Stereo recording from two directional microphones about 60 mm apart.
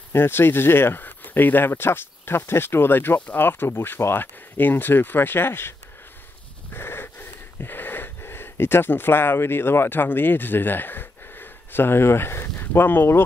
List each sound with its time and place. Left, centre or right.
0.1 s speech: left
6.7 s wheeze: left